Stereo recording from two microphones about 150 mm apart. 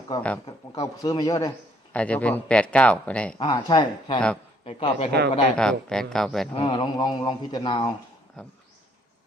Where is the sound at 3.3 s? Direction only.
30° left (ahead or behind).